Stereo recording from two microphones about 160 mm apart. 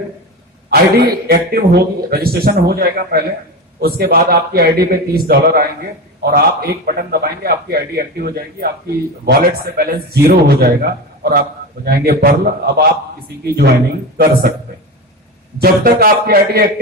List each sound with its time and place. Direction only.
0.7 s a man's voice: 80° right
15.5 s a man's voice: 70° right (ahead or behind)